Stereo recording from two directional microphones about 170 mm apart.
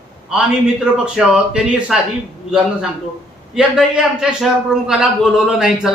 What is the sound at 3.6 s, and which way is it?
A man's voice, 5° right (ahead or behind).